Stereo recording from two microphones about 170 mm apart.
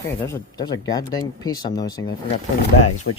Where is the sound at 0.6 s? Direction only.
25° left (ahead or behind).